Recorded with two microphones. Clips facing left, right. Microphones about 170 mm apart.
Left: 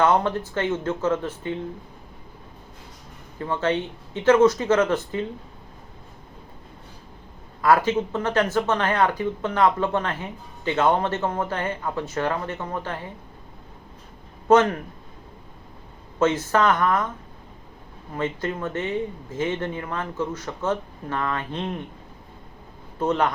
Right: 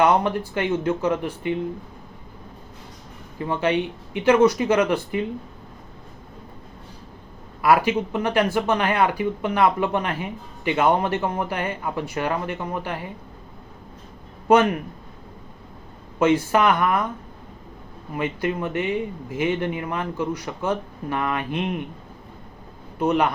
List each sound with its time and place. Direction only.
0.0 s speech: 15° right (ahead or behind)
3.4 s speech: 15° right (ahead or behind)
7.6 s speech: 10° right (ahead or behind)
14.4 s speech: 15° right (ahead or behind)
16.1 s speech: 15° right (ahead or behind)
18.1 s speech: 15° right (ahead or behind)
23.0 s speech: 15° right (ahead or behind)